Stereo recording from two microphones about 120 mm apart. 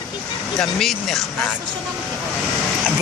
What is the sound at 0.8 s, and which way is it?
Speech, centre (ahead or behind).